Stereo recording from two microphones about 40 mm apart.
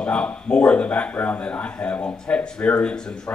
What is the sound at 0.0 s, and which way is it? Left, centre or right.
A man's voice, left.